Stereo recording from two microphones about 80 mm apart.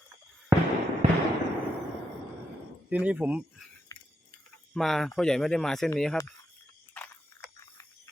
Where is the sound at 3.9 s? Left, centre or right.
Left.